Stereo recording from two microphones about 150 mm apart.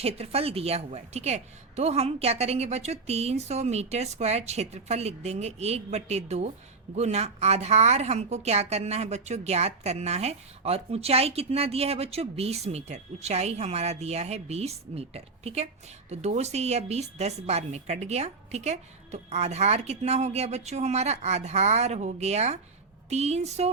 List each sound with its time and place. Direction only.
0.0 s a woman's voice: 40° right (ahead or behind)